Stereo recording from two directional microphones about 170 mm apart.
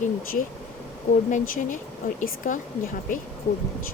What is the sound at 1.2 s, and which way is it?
Speech, 50° left (ahead or behind).